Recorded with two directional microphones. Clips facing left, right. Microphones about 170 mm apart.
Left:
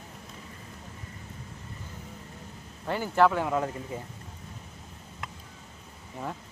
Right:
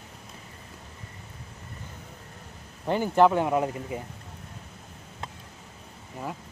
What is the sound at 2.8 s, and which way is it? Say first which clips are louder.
Speech: right 3 dB; 20° right (ahead or behind).